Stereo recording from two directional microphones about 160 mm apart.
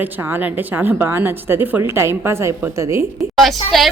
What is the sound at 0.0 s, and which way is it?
A woman's voice, 10° right (ahead or behind).